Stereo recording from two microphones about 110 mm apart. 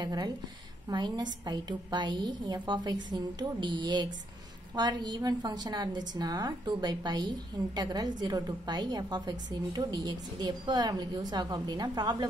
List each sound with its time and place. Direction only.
0.0 s a woman's voice: 40° right (ahead or behind)